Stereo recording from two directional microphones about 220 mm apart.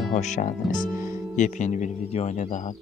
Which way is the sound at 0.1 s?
35° left (ahead or behind).